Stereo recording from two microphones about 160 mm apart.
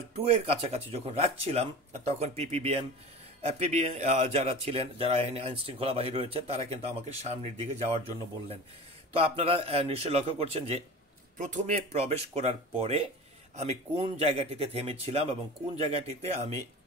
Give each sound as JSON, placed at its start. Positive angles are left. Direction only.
{"t": 0.1, "sound": "speech", "side_deg": -40}
{"t": 9.1, "sound": "speech", "side_deg": -35}